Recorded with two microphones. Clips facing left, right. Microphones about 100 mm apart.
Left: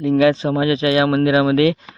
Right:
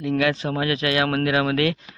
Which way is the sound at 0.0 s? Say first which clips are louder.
Left 7 dB; 25° left (ahead or behind).